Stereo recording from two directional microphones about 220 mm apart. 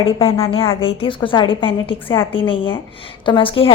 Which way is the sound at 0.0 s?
25° left (ahead or behind).